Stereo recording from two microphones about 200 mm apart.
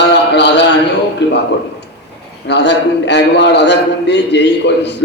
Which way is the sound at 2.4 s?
60° left (ahead or behind).